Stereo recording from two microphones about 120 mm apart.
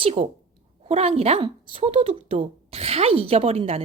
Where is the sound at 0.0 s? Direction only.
55° right (ahead or behind).